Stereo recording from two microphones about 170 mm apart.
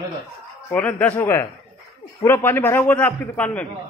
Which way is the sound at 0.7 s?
5° left (ahead or behind).